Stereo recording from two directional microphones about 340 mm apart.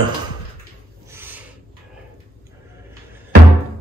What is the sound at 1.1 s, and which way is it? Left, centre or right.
Rub, centre.